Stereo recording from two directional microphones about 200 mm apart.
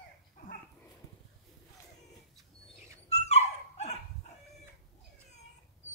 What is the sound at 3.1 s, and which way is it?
Dog, 35° left (ahead or behind).